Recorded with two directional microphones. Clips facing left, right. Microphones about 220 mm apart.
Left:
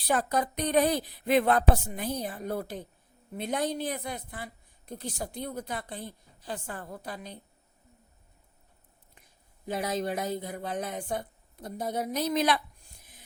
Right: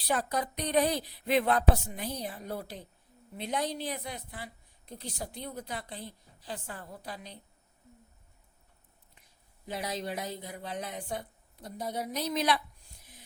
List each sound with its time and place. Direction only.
0.1 s speech: 50° left (ahead or behind)
9.6 s speech: 50° left (ahead or behind)